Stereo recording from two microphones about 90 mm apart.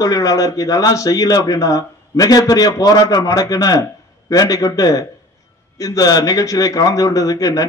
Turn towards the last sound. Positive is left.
turn(degrees=40)  # may be behind; listen again after turning